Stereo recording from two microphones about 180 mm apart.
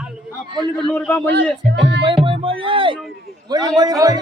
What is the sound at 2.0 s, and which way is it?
Music, 30° right (ahead or behind).